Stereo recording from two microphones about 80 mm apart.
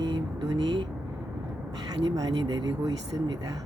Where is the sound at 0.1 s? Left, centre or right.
Right.